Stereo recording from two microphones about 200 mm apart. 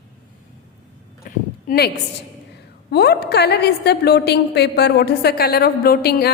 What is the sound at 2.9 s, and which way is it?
A woman's voice, 55° left (ahead or behind).